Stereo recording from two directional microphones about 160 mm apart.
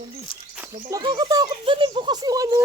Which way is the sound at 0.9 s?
25° right (ahead or behind).